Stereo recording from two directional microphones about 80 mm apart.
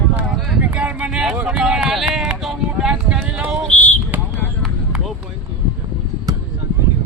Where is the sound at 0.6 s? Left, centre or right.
Centre.